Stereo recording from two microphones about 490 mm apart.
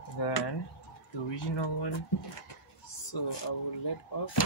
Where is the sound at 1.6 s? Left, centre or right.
Left.